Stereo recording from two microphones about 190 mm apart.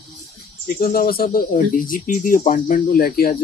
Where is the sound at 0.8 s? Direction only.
50° left (ahead or behind).